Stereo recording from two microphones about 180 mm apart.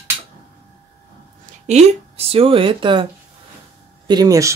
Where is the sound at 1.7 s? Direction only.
35° right (ahead or behind).